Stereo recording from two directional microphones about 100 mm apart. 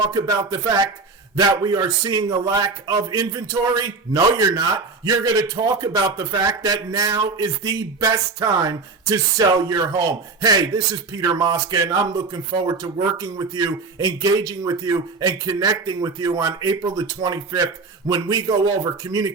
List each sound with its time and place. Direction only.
0.1 s a man's voice: 40° right (ahead or behind)